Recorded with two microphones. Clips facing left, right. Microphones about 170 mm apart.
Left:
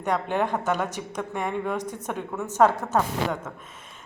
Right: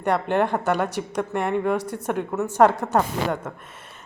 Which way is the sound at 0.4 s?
10° right (ahead or behind).